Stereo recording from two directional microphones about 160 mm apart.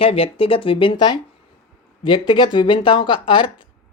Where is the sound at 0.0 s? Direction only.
35° left (ahead or behind).